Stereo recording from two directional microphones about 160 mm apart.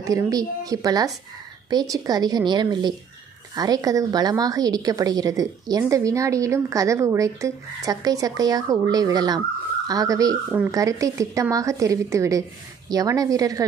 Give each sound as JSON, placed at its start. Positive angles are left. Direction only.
{"t": 0.0, "sound": "a woman's voice", "side_deg": -20}